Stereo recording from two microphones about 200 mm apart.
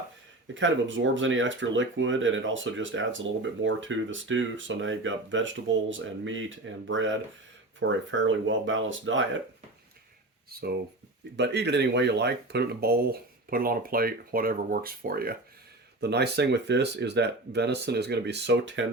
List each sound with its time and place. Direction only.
0.5 s speech: 70° right (ahead or behind)
10.5 s speech: 50° right (ahead or behind)